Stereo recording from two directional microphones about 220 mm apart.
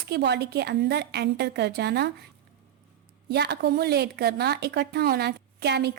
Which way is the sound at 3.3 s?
50° right (ahead or behind).